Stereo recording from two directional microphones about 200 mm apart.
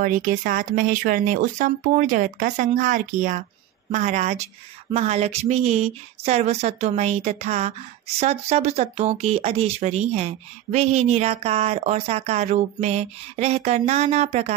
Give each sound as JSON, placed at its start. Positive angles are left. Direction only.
{"t": 0.0, "sound": "speech", "side_deg": -40}